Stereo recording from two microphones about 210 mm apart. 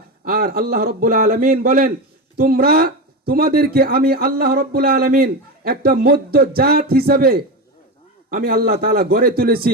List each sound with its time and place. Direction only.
0.3 s speech: 45° right (ahead or behind)